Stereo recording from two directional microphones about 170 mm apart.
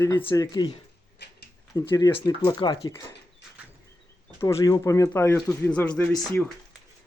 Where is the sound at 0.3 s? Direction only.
20° left (ahead or behind).